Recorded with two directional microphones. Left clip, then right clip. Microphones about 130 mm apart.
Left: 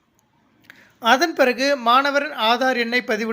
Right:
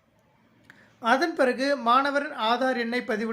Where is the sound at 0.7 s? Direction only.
25° left (ahead or behind).